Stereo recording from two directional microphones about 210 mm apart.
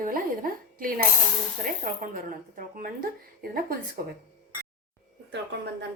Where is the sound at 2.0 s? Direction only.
40° right (ahead or behind).